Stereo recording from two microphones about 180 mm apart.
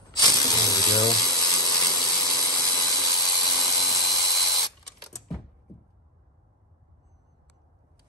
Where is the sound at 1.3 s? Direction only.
20° left (ahead or behind).